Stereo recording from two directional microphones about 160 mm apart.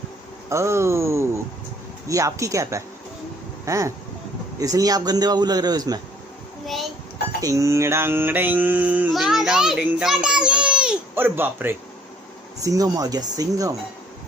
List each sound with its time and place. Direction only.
0.5 s mantra: 15° right (ahead or behind)
2.0 s a man's voice: 20° right (ahead or behind)
6.6 s a sound: centre (ahead or behind)
7.4 s mantra: 20° right (ahead or behind)
12.6 s a man's voice: 20° right (ahead or behind)